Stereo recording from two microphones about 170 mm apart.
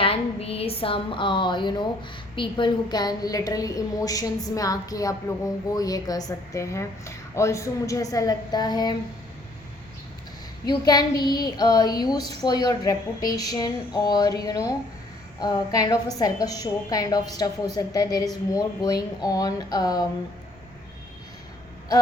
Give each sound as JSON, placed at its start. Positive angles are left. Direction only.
{"t": 0.0, "sound": "a sound", "side_deg": 35}
{"t": 2.3, "sound": "a woman's voice", "side_deg": 30}
{"t": 10.7, "sound": "a woman's voice", "side_deg": 25}